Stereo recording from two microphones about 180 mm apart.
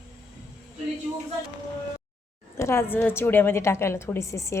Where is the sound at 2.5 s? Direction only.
15° left (ahead or behind).